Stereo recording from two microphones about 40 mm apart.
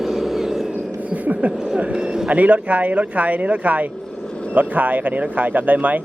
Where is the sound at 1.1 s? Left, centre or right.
Right.